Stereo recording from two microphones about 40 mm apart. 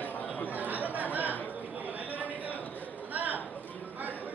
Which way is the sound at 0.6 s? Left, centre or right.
Right.